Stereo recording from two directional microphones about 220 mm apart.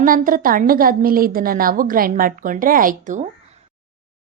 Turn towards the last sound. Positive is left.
turn(degrees=-35)  # may be behind; listen again after turning